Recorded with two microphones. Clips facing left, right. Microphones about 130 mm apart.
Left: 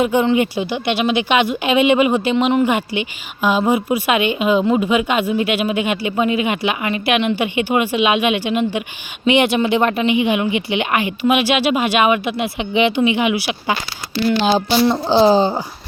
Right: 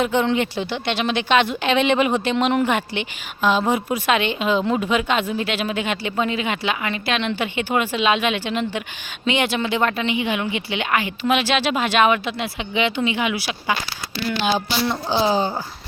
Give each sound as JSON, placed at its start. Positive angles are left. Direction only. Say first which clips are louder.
{"t": 0.0, "sound": "speech", "louder": "left 4 dB", "side_deg": 5}
{"t": 14.3, "sound": "a woman's voice", "louder": "left 6 dB", "side_deg": 30}